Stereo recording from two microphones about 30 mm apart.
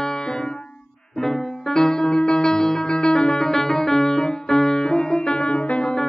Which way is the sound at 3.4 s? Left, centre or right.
Centre.